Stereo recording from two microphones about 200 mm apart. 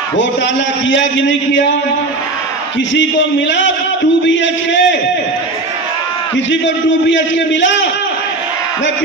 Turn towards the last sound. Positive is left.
turn(degrees=65)  # may be behind; listen again after turning